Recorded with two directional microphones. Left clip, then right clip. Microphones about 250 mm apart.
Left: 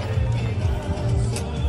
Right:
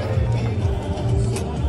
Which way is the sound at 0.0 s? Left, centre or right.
Left.